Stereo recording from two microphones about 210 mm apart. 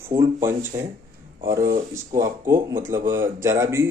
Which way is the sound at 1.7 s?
45° right (ahead or behind).